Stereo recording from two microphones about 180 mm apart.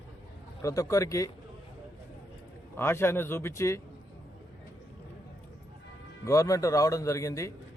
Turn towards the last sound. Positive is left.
turn(degrees=15)  # may be behind; listen again after turning